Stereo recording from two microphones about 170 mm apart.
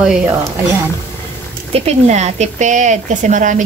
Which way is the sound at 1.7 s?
40° right (ahead or behind).